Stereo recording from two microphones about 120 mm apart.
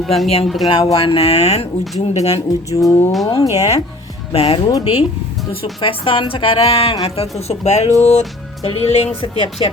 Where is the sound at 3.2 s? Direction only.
30° left (ahead or behind).